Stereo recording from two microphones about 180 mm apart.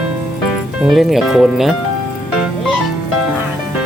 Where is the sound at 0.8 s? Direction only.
Centre (ahead or behind).